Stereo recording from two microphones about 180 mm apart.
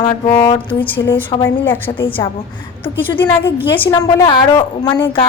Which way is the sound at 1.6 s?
10° left (ahead or behind).